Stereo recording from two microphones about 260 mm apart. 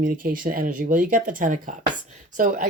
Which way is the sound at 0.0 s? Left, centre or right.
Right.